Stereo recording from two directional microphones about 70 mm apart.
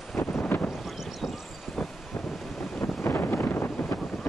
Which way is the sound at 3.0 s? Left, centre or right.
Left.